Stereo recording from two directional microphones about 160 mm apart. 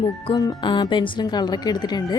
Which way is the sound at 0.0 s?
30° left (ahead or behind).